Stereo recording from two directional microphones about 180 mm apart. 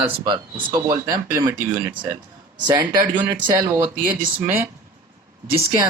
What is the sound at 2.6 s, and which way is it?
Speech, 25° right (ahead or behind).